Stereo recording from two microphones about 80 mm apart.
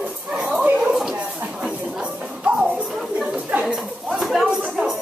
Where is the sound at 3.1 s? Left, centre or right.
Centre.